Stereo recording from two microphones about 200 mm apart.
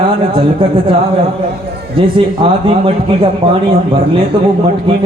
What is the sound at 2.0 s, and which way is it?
A man's voice, 25° right (ahead or behind).